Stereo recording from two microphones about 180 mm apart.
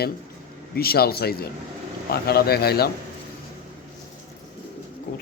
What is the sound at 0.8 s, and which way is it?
A man's voice, 60° left (ahead or behind).